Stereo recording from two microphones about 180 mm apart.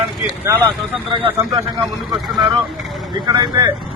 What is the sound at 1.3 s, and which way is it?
Speech, 15° right (ahead or behind).